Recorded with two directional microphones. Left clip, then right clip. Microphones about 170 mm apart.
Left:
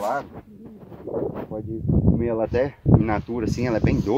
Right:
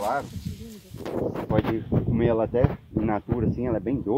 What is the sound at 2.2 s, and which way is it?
Speech, 10° right (ahead or behind).